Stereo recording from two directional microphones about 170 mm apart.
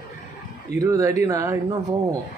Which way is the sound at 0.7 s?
20° right (ahead or behind).